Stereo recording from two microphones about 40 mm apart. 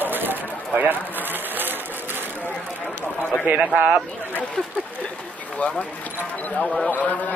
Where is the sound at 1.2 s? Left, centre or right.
Right.